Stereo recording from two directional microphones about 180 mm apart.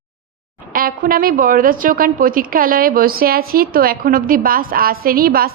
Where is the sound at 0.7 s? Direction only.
55° right (ahead or behind).